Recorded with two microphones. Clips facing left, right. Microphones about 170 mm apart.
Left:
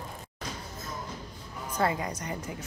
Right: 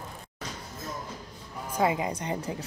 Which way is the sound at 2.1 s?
30° right (ahead or behind).